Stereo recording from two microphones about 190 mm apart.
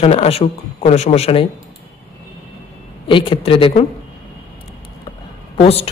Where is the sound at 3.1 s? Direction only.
25° left (ahead or behind).